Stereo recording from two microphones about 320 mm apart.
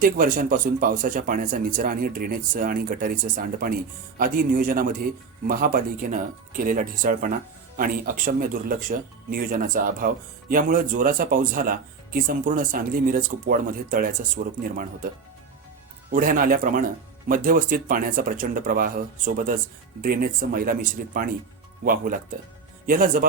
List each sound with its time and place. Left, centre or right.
0.0 s speech: right
16.1 s speech: right